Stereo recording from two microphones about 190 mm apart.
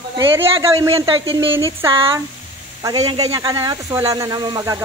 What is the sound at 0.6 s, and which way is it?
Speech, 15° right (ahead or behind).